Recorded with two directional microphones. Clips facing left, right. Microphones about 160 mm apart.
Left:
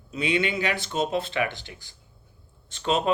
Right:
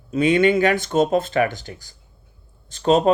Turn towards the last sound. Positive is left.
turn(degrees=-40)  # may be behind; listen again after turning